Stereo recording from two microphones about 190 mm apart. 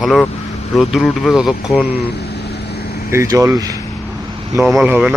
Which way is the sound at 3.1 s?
15° right (ahead or behind).